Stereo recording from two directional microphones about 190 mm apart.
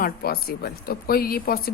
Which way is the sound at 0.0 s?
50° left (ahead or behind).